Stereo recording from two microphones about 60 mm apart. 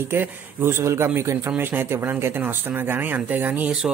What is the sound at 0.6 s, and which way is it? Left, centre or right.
Speech, right.